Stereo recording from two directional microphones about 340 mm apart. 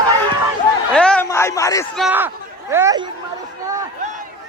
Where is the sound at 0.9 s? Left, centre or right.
Centre.